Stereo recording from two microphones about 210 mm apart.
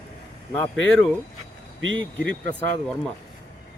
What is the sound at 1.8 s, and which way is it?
Speech, 65° right (ahead or behind).